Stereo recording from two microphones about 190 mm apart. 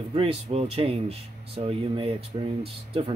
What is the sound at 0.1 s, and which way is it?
Speech, 30° right (ahead or behind).